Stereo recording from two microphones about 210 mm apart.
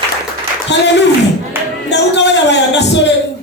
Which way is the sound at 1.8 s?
55° left (ahead or behind).